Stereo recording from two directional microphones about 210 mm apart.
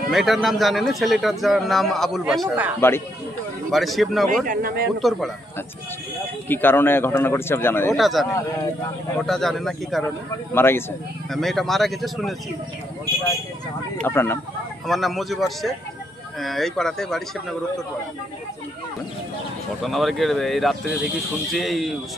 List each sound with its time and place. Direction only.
0.1 s a man's voice: centre (ahead or behind)
3.7 s a man's voice: centre (ahead or behind)
4.5 s speech: 45° right (ahead or behind)
5.0 s a man's voice: centre (ahead or behind)
6.5 s speech: 10° left (ahead or behind)
8.0 s a man's voice: centre (ahead or behind)
10.5 s a man's voice: 10° left (ahead or behind)
14.0 s speech: 10° left (ahead or behind)
14.9 s a man's voice: centre (ahead or behind)
19.8 s a man's voice: centre (ahead or behind)